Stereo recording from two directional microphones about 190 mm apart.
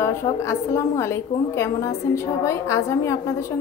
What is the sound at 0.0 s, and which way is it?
A woman's voice, 15° left (ahead or behind).